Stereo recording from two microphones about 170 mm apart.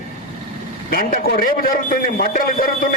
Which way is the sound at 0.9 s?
55° left (ahead or behind).